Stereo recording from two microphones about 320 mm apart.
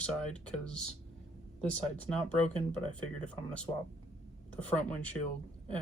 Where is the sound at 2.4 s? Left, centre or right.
Left.